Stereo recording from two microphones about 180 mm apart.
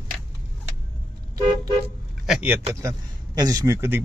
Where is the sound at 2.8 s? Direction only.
20° right (ahead or behind).